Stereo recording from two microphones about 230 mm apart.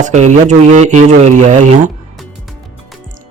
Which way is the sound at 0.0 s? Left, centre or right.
Right.